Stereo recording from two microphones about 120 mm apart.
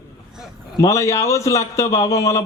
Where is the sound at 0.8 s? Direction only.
25° left (ahead or behind).